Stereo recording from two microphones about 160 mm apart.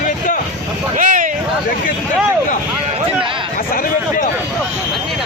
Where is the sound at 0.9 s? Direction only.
55° right (ahead or behind).